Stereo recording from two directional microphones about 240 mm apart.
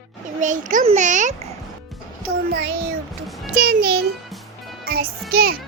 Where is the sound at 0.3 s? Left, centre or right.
Right.